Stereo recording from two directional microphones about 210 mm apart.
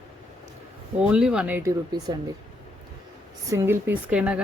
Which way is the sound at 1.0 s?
5° right (ahead or behind).